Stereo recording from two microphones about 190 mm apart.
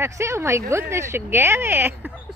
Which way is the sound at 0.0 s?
15° right (ahead or behind).